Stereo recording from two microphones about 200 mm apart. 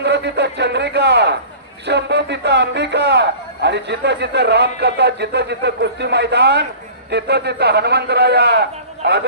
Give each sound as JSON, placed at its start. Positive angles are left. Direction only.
{"t": 0.0, "sound": "speech", "side_deg": -60}